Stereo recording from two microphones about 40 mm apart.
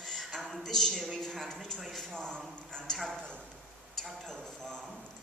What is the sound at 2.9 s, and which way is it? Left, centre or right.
Speech, centre.